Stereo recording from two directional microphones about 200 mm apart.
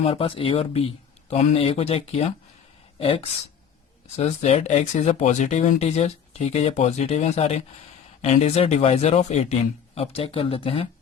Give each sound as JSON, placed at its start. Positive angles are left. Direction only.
{"t": 0.0, "sound": "speech", "side_deg": 30}